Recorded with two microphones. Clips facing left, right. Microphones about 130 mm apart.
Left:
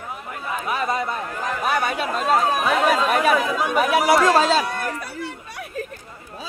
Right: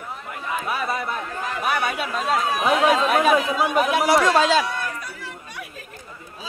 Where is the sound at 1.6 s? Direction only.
35° left (ahead or behind).